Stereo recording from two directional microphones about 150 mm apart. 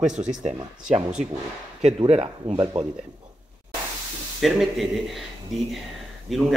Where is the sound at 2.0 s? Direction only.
40° right (ahead or behind).